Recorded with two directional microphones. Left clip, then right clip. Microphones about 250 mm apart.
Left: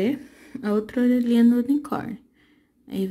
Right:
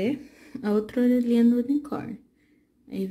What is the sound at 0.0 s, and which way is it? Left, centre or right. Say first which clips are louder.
Speech: left 3 dB; centre.